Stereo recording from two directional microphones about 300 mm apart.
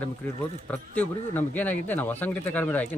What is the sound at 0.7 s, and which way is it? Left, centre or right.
Speech, centre.